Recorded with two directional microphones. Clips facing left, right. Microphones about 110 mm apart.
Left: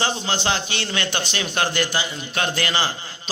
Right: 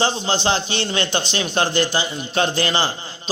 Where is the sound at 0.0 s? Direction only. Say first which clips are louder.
Right 3 dB; 30° right (ahead or behind).